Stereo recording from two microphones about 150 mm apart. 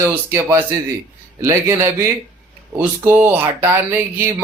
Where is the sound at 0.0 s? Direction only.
15° right (ahead or behind).